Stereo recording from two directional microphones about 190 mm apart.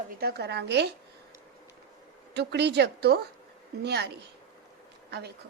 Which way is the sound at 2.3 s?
60° right (ahead or behind).